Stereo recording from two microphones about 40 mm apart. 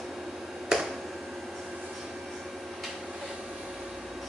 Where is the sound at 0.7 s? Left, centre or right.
Centre.